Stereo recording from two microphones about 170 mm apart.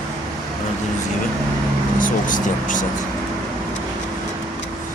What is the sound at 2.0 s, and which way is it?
Speech, 50° left (ahead or behind).